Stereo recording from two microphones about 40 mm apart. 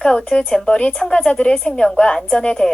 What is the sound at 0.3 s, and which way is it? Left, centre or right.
A woman's voice, centre.